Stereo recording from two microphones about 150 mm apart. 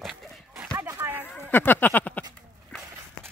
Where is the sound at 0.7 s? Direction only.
20° right (ahead or behind).